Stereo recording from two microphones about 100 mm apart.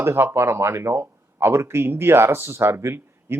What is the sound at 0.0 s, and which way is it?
Speech, 25° right (ahead or behind).